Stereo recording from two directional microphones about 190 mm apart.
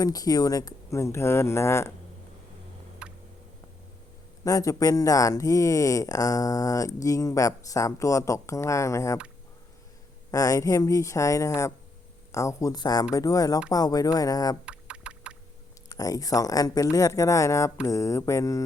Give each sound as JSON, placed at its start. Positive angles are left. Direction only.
{"t": 0.0, "sound": "speech", "side_deg": 20}
{"t": 3.0, "sound": "a sound", "side_deg": -5}
{"t": 4.4, "sound": "speech", "side_deg": 20}
{"t": 10.3, "sound": "speech", "side_deg": 20}
{"t": 14.6, "sound": "knock", "side_deg": -5}
{"t": 15.9, "sound": "speech", "side_deg": 20}